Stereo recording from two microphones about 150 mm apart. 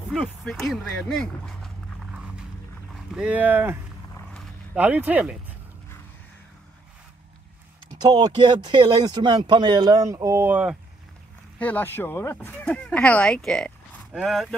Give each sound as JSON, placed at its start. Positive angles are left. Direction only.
{"t": 0.1, "sound": "speech", "side_deg": 0}
{"t": 3.1, "sound": "speech", "side_deg": -5}
{"t": 8.0, "sound": "speech", "side_deg": -25}
{"t": 11.5, "sound": "speech", "side_deg": 10}